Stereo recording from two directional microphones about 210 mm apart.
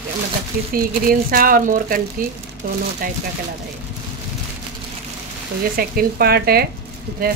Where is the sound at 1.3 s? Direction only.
40° right (ahead or behind).